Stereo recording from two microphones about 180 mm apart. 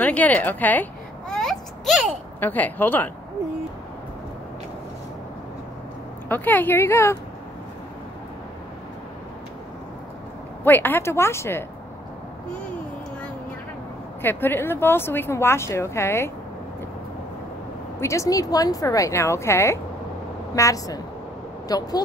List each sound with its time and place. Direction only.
0.0 s a woman's voice: 10° left (ahead or behind)
1.3 s a sound: centre (ahead or behind)
6.2 s a woman's voice: 10° left (ahead or behind)
10.6 s a woman's voice: 10° left (ahead or behind)
14.2 s a woman's voice: 10° left (ahead or behind)
18.0 s a woman's voice: 15° left (ahead or behind)